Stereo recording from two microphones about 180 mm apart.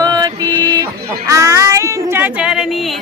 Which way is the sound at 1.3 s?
15° right (ahead or behind).